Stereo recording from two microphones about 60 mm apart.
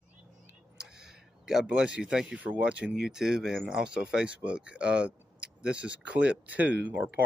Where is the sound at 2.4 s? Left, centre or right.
Right.